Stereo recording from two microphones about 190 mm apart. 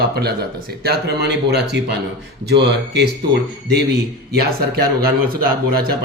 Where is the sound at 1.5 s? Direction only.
60° right (ahead or behind).